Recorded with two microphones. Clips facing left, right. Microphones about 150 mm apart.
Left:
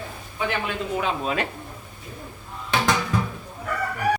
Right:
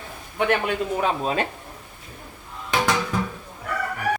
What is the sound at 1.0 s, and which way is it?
Speech, 35° right (ahead or behind).